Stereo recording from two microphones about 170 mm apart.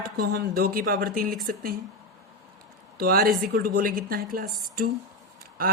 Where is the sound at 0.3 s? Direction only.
60° right (ahead or behind).